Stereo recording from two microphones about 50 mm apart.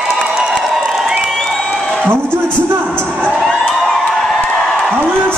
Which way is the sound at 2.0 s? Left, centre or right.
Right.